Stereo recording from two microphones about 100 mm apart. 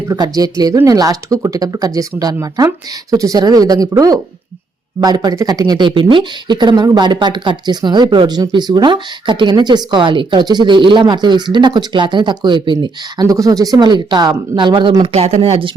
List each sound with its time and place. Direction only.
0.1 s speech: 40° right (ahead or behind)
13.2 s speech: 35° right (ahead or behind); by 15.1 s 55° right (ahead or behind)
15.1 s speech: 90° right
15.4 s speech: 55° right (ahead or behind)